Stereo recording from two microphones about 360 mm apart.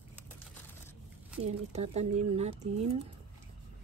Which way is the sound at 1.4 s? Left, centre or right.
Centre.